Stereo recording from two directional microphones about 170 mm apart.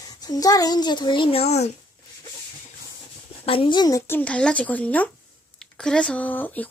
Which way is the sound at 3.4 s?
30° left (ahead or behind).